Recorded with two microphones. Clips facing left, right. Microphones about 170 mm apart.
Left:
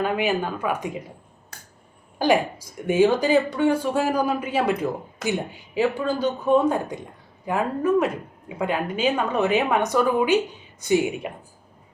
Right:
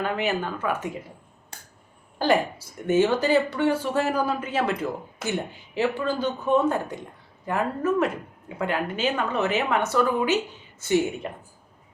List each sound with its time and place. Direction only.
0.0 s speech: 15° left (ahead or behind)
2.1 s speech: 15° left (ahead or behind)